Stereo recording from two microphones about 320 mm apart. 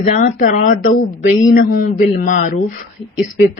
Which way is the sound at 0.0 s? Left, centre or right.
Left.